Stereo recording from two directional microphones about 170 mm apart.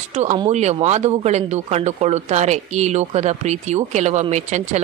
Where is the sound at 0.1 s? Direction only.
40° right (ahead or behind).